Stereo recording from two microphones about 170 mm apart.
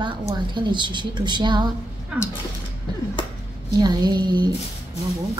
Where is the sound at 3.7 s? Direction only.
25° right (ahead or behind).